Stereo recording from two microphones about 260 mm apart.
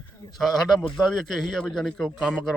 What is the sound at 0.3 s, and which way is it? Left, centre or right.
Speech, centre.